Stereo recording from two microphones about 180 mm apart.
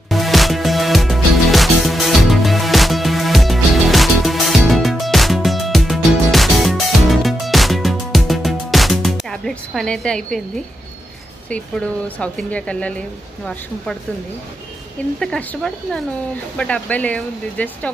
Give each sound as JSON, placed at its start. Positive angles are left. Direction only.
{"t": 0.1, "sound": "music", "side_deg": 0}
{"t": 12.2, "sound": "speech", "side_deg": 5}
{"t": 15.1, "sound": "speech", "side_deg": 5}